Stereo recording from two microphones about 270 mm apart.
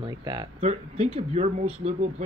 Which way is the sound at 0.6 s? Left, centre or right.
Right.